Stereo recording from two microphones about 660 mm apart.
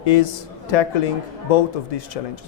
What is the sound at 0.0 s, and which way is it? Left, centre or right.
A man's voice, left.